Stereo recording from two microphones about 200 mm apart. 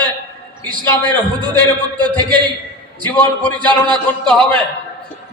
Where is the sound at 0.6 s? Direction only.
20° right (ahead or behind).